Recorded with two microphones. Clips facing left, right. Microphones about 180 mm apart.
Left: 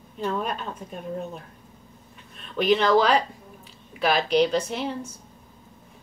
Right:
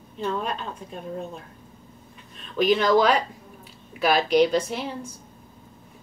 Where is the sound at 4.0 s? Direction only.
5° right (ahead or behind).